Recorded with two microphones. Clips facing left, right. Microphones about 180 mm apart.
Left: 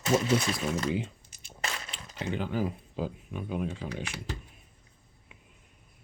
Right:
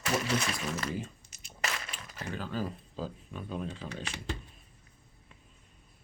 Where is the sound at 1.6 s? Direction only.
30° left (ahead or behind); by 4.4 s 10° left (ahead or behind).